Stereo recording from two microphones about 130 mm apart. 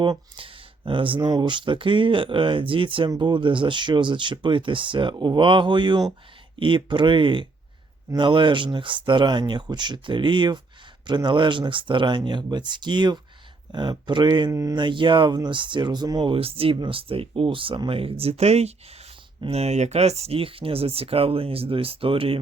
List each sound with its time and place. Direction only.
0.0 s speech: 40° right (ahead or behind)
14.5 s speech: 25° right (ahead or behind)
14.8 s speech: 35° right (ahead or behind)
16.3 s speech: 45° right (ahead or behind)